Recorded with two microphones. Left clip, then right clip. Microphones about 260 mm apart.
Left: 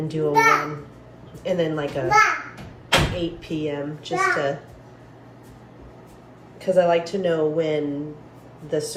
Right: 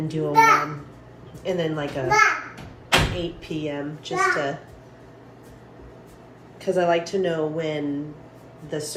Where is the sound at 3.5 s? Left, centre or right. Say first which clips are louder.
Left 2 dB; right.